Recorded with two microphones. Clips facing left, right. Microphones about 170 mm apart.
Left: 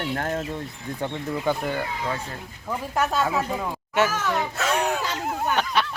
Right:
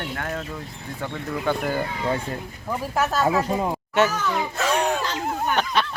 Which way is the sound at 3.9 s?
5° left (ahead or behind).